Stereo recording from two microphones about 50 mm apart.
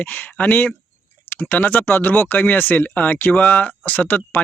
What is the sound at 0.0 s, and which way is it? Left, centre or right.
Speech, left.